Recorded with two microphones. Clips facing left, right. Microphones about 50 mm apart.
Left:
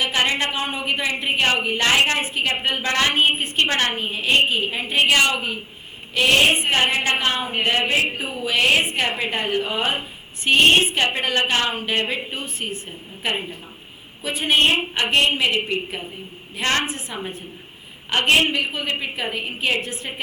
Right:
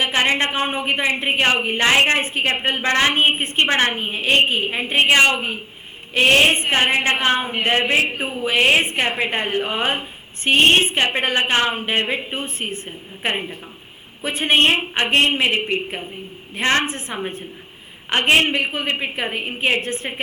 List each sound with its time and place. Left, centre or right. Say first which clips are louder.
0.0 s a woman's voice: right 2 dB; right
14.2 s a woman's voice: right 2 dB; right